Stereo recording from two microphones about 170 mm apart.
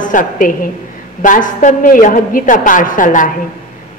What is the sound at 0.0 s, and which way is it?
A woman's voice, 50° left (ahead or behind).